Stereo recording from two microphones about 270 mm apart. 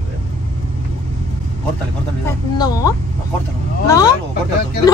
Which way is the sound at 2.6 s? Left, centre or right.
Centre.